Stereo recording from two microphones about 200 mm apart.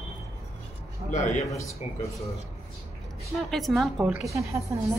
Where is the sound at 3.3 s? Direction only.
Centre (ahead or behind).